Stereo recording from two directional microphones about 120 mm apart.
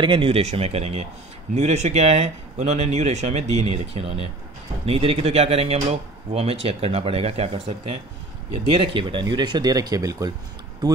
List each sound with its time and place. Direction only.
0.0 s speech: 50° right (ahead or behind)
1.5 s speech: 65° right (ahead or behind); by 10.3 s 30° right (ahead or behind)